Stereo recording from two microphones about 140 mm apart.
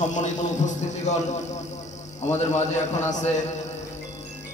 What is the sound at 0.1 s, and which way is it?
A man's voice, 60° left (ahead or behind).